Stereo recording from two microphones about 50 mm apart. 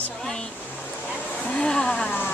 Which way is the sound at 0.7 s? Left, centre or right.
Left.